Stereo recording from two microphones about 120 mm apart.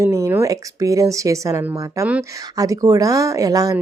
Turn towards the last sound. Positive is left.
turn(degrees=-30)  # may be behind; listen again after turning